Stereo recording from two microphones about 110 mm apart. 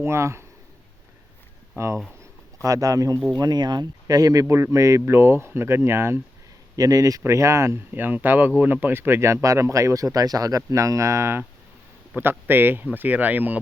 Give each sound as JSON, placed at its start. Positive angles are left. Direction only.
{"t": 0.0, "sound": "speech", "side_deg": -25}
{"t": 1.7, "sound": "speech", "side_deg": -25}
{"t": 6.7, "sound": "speech", "side_deg": -35}